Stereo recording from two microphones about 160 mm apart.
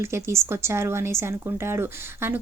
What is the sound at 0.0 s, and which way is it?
Speech, 15° right (ahead or behind).